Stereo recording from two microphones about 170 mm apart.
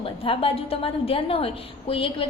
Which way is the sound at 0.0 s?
35° left (ahead or behind).